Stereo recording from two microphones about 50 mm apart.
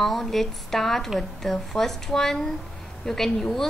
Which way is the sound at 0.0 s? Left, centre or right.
Centre.